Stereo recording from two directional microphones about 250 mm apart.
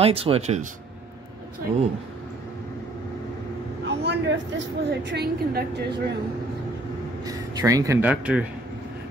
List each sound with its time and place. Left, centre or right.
0.0 s speech: right
3.8 s a woman's voice: right
7.2 s speech: centre